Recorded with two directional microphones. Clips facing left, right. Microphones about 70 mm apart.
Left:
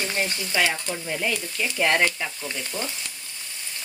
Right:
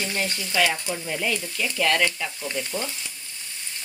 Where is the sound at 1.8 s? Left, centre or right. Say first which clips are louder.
Left 1 dB; left.